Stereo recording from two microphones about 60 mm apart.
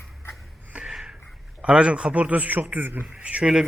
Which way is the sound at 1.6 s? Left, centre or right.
Centre.